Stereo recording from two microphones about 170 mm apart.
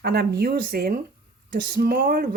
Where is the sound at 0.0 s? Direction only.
70° right (ahead or behind).